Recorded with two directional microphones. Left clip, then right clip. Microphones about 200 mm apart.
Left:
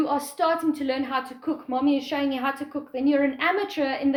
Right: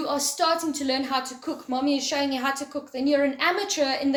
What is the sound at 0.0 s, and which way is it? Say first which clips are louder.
A woman's voice: left 1 dB; 45° left (ahead or behind).